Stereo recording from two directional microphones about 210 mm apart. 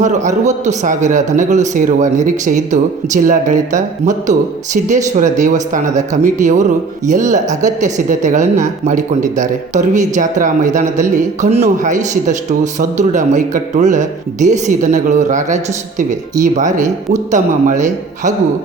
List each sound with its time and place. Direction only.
0.0 s speech: 35° right (ahead or behind)